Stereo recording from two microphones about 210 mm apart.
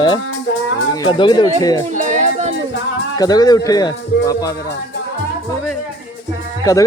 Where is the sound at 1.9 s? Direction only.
35° right (ahead or behind).